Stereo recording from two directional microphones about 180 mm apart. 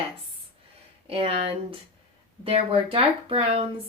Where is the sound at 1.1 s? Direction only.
30° right (ahead or behind).